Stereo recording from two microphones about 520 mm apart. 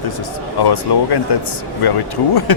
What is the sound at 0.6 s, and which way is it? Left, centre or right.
Speech, left.